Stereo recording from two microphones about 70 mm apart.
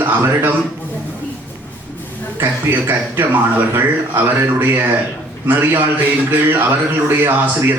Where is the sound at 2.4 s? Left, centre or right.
Right.